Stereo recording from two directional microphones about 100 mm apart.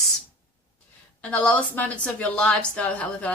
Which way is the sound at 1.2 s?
15° left (ahead or behind).